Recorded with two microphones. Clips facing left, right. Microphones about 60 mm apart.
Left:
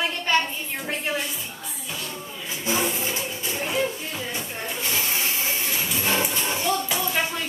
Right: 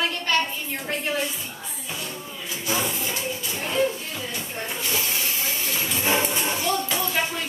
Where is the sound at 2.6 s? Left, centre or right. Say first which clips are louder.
Left 2 dB; left.